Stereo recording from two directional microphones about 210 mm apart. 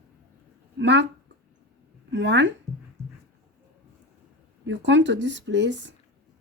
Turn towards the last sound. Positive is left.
turn(degrees=-55)  # may be behind; listen again after turning